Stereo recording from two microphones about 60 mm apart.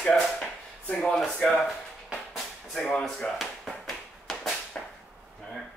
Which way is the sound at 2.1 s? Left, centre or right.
Centre.